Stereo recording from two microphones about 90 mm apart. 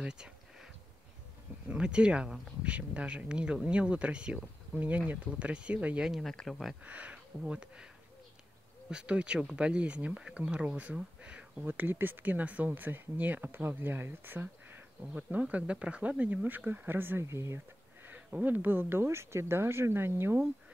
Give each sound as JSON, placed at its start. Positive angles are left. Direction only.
{"t": 0.0, "sound": "a sound", "side_deg": -10}
{"t": 1.7, "sound": "speech", "side_deg": -10}
{"t": 6.8, "sound": "speech", "side_deg": -15}
{"t": 8.9, "sound": "speech", "side_deg": -10}
{"t": 18.0, "sound": "speech", "side_deg": -20}